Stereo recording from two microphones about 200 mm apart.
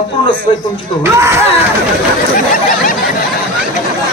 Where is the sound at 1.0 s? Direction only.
15° right (ahead or behind).